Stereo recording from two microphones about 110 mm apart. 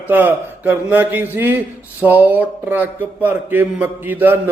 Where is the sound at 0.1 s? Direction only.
15° right (ahead or behind).